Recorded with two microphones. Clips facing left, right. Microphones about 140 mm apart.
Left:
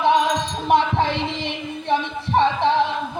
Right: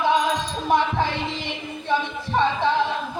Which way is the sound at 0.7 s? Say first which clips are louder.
Left 3 dB; 25° left (ahead or behind).